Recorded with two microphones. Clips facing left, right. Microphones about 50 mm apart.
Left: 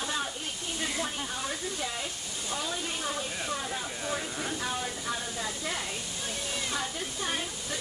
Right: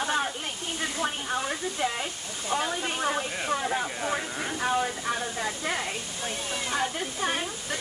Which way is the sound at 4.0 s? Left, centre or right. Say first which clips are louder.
Right 4 dB; right.